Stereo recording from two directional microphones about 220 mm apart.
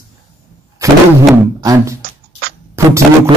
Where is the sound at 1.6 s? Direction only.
15° right (ahead or behind).